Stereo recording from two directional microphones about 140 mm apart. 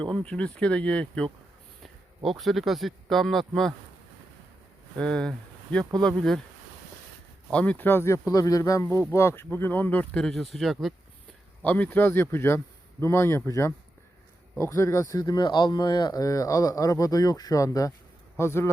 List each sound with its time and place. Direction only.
0.2 s speech: 5° left (ahead or behind)
4.9 s speech: 5° left (ahead or behind)
7.5 s speech: 10° left (ahead or behind)
11.6 s speech: 10° left (ahead or behind)